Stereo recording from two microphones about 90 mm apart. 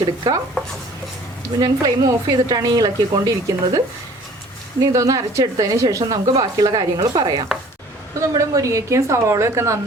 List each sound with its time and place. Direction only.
0.0 s a woman's voice: 50° right (ahead or behind)
1.5 s a woman's voice: 45° right (ahead or behind)
4.8 s a woman's voice: 40° right (ahead or behind)
8.4 s a woman's voice: 35° right (ahead or behind)